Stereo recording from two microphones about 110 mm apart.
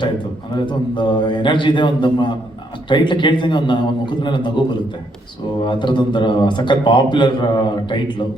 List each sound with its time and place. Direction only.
0.6 s a man's voice: 45° left (ahead or behind)
5.6 s a man's voice: 45° left (ahead or behind)